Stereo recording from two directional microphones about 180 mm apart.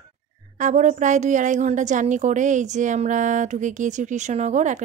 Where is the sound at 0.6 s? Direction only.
45° right (ahead or behind).